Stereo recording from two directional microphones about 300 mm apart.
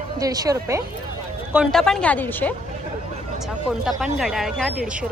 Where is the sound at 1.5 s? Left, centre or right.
Centre.